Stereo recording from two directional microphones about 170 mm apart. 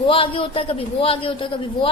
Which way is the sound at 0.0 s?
30° left (ahead or behind).